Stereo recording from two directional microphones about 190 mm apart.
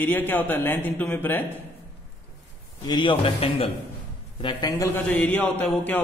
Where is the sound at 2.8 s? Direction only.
25° left (ahead or behind).